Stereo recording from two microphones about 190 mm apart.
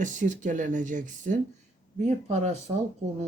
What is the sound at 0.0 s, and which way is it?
Speech, 40° right (ahead or behind).